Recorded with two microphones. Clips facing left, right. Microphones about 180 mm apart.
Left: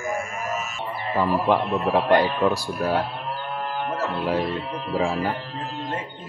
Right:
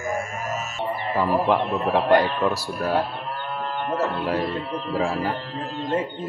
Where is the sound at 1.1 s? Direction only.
5° right (ahead or behind).